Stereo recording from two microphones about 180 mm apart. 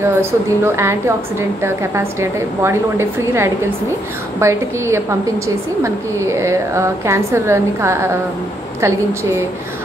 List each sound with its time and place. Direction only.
0.0 s a woman's voice: 15° right (ahead or behind)